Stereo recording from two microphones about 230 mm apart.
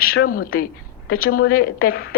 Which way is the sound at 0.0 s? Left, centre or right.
Left.